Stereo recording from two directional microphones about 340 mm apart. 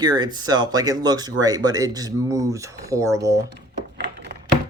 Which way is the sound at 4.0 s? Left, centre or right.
Right.